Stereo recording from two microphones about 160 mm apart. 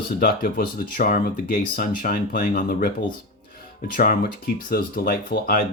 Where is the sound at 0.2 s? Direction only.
65° left (ahead or behind).